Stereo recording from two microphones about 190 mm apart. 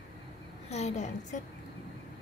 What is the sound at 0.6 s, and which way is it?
Speech, 35° left (ahead or behind).